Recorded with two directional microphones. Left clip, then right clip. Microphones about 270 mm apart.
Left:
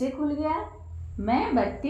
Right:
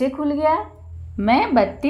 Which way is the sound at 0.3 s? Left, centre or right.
Right.